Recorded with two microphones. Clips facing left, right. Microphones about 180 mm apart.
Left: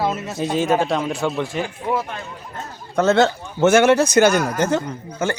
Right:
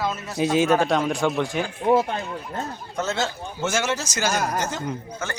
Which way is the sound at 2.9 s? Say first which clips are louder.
Left 11 dB; 60° left (ahead or behind).